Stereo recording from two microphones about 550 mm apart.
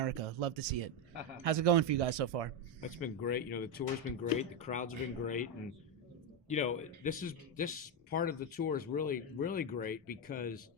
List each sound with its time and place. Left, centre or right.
0.0 s speech: right
3.0 s speech: centre
6.5 s speech: centre